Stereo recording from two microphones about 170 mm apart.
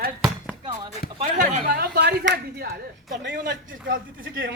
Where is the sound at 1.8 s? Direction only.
70° right (ahead or behind).